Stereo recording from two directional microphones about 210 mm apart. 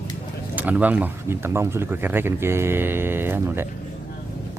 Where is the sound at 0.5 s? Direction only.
5° right (ahead or behind).